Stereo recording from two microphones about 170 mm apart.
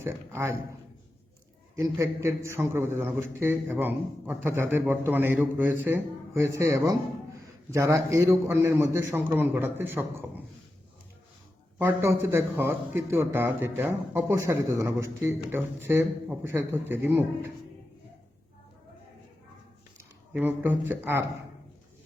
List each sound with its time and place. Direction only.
0.0 s a man's voice: 15° right (ahead or behind)
1.7 s a man's voice: 15° right (ahead or behind)
11.8 s a man's voice: 15° right (ahead or behind)
20.0 s speech: 10° right (ahead or behind)